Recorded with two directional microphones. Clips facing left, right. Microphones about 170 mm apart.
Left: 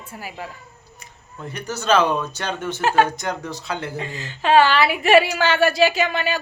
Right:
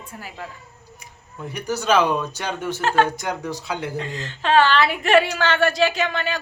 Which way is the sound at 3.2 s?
10° right (ahead or behind).